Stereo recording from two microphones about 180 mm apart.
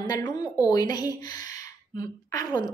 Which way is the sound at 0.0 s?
25° left (ahead or behind).